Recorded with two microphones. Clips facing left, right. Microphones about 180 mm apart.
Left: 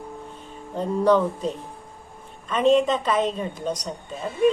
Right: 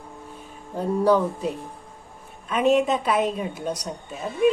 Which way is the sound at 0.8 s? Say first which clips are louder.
Even; 10° right (ahead or behind).